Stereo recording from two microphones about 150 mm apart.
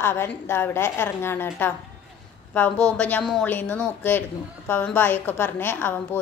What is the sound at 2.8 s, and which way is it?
A man's voice, 10° left (ahead or behind).